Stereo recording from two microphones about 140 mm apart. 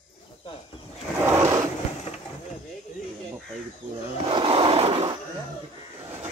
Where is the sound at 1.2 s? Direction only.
20° right (ahead or behind).